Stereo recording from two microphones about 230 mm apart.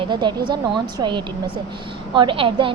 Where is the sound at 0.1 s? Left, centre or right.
Centre.